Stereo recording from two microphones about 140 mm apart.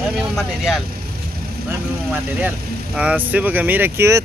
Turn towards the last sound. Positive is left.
turn(degrees=-20)  # may be behind; listen again after turning